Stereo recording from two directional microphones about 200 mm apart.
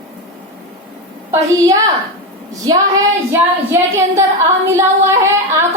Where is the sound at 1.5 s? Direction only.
15° right (ahead or behind).